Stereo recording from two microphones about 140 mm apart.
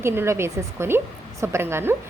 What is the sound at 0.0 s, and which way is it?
A woman's voice, 20° right (ahead or behind).